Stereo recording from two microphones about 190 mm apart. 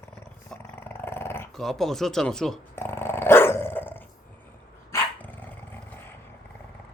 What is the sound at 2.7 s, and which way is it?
Dog, 10° left (ahead or behind).